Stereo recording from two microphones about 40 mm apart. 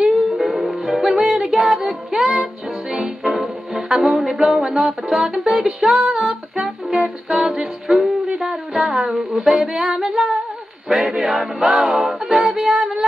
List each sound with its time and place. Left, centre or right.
0.0 s music: centre
6.9 s music: centre
8.4 s a sound: centre
9.8 s female singing: centre
10.9 s music: centre